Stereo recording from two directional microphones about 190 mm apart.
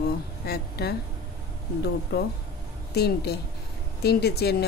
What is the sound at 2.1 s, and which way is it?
A woman's voice, 55° left (ahead or behind).